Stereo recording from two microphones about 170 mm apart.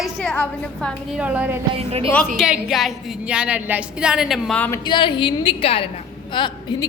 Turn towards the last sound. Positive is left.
turn(degrees=25)  # may be behind; listen again after turning